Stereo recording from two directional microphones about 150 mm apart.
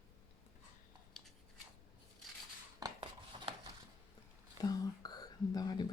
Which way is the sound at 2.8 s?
35° right (ahead or behind).